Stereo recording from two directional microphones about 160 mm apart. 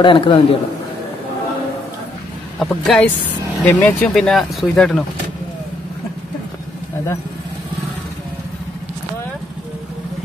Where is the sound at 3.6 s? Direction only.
15° left (ahead or behind).